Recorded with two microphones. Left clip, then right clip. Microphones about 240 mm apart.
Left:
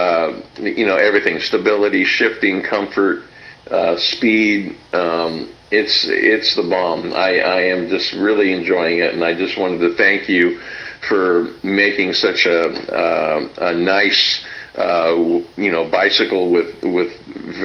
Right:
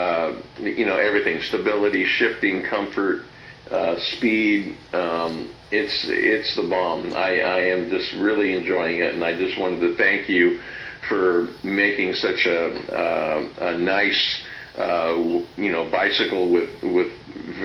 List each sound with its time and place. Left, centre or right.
0.0 s speech: left